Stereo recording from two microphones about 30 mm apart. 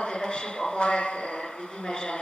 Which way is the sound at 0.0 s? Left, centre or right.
Left.